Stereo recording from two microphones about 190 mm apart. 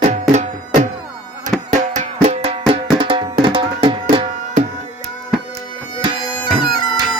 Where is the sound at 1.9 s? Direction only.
35° right (ahead or behind).